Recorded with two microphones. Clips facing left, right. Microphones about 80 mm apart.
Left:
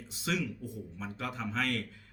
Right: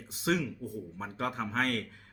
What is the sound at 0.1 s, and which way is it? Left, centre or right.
Speech, right.